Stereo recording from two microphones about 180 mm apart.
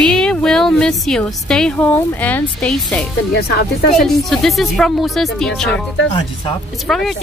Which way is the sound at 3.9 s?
Centre (ahead or behind).